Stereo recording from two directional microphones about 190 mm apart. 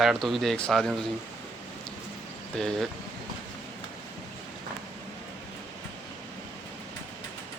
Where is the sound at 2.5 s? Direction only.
Centre (ahead or behind).